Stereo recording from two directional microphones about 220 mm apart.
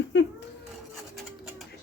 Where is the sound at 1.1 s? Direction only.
Centre (ahead or behind).